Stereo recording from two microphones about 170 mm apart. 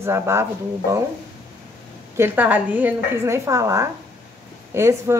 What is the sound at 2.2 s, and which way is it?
Speech, 10° right (ahead or behind).